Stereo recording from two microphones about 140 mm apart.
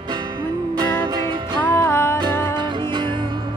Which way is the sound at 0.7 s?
30° right (ahead or behind).